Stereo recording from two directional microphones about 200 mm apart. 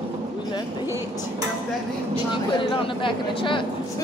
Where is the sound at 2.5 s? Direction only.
25° left (ahead or behind).